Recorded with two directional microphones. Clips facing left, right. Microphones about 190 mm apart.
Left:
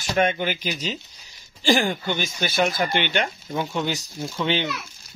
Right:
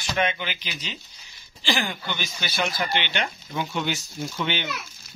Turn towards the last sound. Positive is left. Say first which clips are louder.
# left 4 dB
turn(degrees=30)  # may be behind; listen again after turning